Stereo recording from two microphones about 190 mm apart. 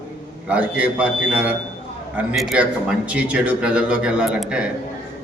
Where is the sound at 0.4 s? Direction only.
5° right (ahead or behind).